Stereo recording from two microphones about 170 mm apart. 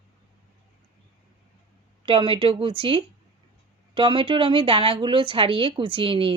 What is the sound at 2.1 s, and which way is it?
Speech, 30° right (ahead or behind).